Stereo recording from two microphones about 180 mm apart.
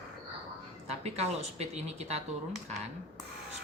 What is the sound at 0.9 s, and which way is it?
Speech, 35° right (ahead or behind).